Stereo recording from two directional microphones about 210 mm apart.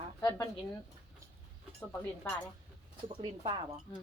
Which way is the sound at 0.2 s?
15° left (ahead or behind).